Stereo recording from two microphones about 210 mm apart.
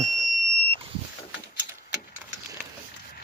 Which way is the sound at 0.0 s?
30° right (ahead or behind).